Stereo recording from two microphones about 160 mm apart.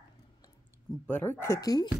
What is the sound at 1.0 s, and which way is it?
Speech, 10° left (ahead or behind).